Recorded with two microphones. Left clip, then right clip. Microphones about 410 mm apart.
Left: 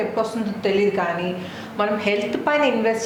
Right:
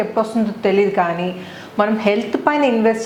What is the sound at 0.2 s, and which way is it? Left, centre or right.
A woman's voice, right.